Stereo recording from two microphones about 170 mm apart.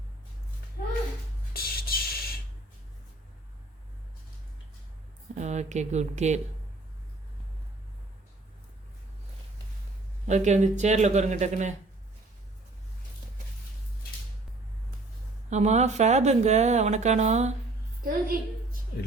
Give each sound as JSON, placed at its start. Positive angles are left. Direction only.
{"t": 1.5, "sound": "music", "side_deg": 60}
{"t": 5.3, "sound": "speech", "side_deg": -40}
{"t": 10.2, "sound": "speech", "side_deg": -45}
{"t": 15.4, "sound": "speech", "side_deg": -40}
{"t": 18.0, "sound": "a woman's voice", "side_deg": -55}